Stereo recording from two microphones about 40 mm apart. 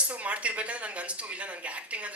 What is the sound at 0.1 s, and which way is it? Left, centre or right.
Speech, right.